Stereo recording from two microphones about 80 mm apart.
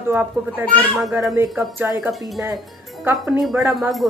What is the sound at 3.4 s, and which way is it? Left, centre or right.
Speech, centre.